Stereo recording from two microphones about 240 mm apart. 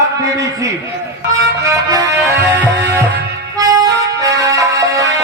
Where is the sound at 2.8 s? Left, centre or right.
Right.